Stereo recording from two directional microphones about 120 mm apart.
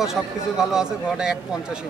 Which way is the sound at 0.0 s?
5° right (ahead or behind).